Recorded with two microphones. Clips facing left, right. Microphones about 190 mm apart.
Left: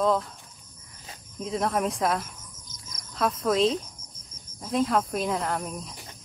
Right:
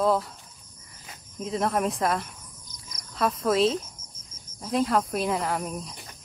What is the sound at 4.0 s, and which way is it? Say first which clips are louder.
Cricket: left 1 dB; 60° left (ahead or behind).